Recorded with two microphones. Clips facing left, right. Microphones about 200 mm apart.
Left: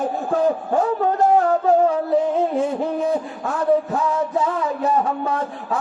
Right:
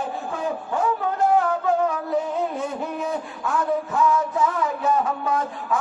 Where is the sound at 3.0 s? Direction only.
30° left (ahead or behind).